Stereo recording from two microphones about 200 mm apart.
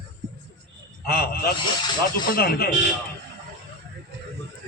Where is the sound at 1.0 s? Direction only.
50° left (ahead or behind).